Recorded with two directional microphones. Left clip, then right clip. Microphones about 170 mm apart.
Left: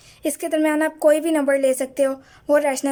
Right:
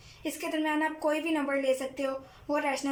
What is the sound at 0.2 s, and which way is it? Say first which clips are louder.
A woman's voice: left 11 dB; 45° left (ahead or behind).